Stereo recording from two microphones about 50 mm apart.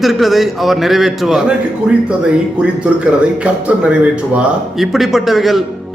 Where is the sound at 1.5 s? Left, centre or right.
Right.